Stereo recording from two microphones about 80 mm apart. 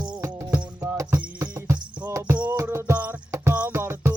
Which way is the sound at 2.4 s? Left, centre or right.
Right.